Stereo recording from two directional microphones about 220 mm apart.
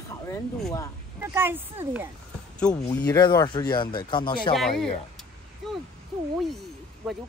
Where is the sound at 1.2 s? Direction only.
10° right (ahead or behind).